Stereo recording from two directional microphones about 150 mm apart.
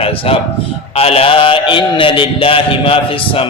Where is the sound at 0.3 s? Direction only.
40° left (ahead or behind).